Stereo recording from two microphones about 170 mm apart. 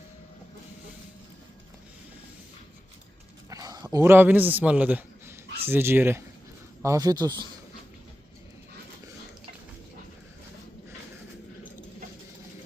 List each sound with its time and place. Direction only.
3.5 s a man's voice: 20° right (ahead or behind)